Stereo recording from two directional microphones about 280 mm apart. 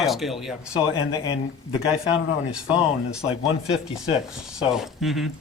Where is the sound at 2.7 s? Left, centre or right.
Centre.